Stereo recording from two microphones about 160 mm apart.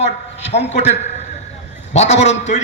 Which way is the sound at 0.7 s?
45° left (ahead or behind).